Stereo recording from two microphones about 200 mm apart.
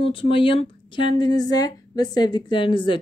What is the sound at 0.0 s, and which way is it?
Speech, 25° left (ahead or behind).